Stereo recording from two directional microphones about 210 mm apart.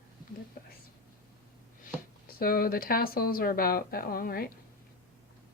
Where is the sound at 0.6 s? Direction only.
45° left (ahead or behind).